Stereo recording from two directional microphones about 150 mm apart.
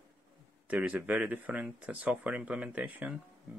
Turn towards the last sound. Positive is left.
turn(degrees=-10)  # may be behind; listen again after turning